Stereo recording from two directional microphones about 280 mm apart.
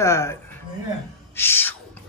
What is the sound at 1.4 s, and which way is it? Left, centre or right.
Speech, centre.